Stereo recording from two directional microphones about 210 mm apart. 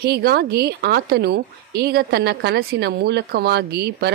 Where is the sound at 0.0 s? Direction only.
50° right (ahead or behind).